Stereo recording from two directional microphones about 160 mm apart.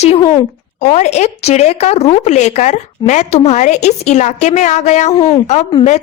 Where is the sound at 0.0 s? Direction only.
40° left (ahead or behind).